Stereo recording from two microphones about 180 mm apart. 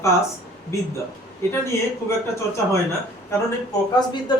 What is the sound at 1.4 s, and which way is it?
Speech, 15° left (ahead or behind).